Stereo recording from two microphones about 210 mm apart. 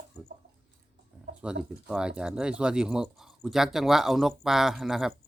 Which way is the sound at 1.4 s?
5° right (ahead or behind).